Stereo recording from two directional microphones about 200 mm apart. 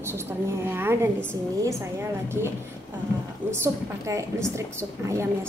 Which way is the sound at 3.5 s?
15° right (ahead or behind).